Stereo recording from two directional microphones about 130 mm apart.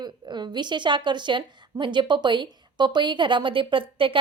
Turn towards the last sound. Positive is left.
turn(degrees=-40)  # may be behind; listen again after turning